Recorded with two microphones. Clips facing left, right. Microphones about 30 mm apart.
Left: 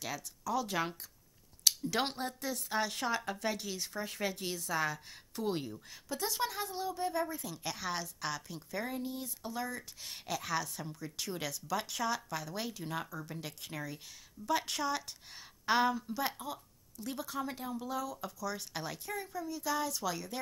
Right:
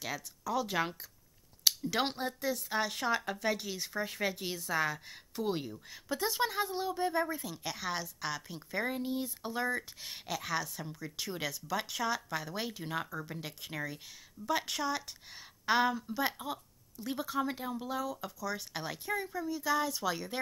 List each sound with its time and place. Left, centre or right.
0.0 s a woman's voice: centre
6.0 s a woman's voice: centre
7.4 s a woman's voice: centre; by 9.8 s right
10.0 s a woman's voice: centre